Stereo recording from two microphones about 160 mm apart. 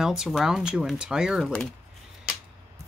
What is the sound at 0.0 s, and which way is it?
Speech, 5° right (ahead or behind).